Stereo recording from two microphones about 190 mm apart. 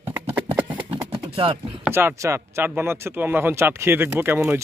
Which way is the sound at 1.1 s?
25° right (ahead or behind).